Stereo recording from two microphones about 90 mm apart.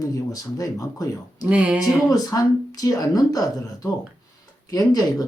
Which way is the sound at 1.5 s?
15° right (ahead or behind).